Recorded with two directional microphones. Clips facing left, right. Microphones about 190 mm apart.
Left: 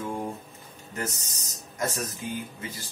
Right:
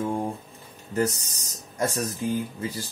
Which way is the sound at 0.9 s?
35° right (ahead or behind).